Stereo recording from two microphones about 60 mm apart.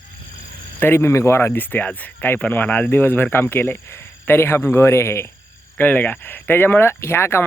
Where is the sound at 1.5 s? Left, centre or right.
Left.